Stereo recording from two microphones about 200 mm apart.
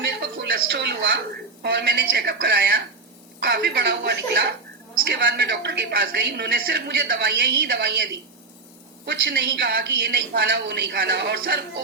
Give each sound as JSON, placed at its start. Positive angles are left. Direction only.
{"t": 0.0, "sound": "a sound", "side_deg": -55}
{"t": 1.6, "sound": "a woman's voice", "side_deg": -55}
{"t": 9.0, "sound": "a woman's voice", "side_deg": -55}